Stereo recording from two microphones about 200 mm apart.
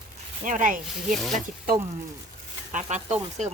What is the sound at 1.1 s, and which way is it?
Speech, centre (ahead or behind).